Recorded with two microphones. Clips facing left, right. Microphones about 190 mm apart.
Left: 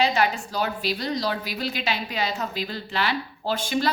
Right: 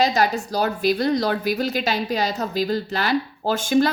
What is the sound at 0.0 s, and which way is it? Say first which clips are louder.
Speech: right 3 dB; 40° right (ahead or behind).